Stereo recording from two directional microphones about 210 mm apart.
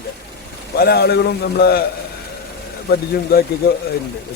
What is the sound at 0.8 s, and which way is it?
A man's voice, 50° left (ahead or behind).